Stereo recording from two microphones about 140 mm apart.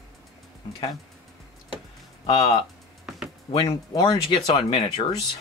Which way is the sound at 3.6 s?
25° left (ahead or behind).